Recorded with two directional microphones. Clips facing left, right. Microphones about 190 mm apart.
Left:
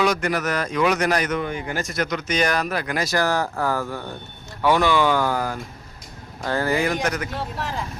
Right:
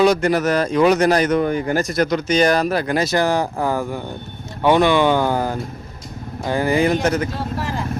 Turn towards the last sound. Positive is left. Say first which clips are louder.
# right 4 dB
turn(degrees=0)  # may be behind; listen again after turning